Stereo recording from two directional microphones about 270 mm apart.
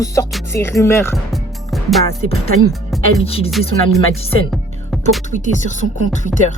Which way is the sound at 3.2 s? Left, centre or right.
Left.